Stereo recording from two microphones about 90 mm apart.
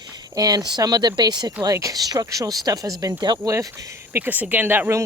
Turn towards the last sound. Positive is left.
turn(degrees=-20)  # may be behind; listen again after turning